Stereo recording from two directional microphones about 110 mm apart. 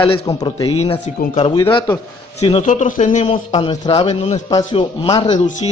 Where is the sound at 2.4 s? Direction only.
80° left.